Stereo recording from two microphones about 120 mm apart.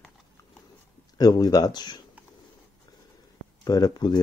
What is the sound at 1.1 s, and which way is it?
Speech, 35° left (ahead or behind).